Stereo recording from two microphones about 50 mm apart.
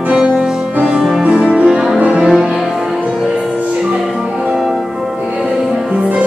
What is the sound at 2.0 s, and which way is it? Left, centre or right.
Music, right.